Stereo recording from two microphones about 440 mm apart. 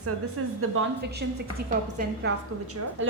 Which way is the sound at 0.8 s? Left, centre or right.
Right.